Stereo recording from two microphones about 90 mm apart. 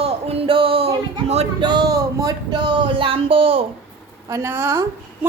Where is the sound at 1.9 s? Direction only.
40° right (ahead or behind).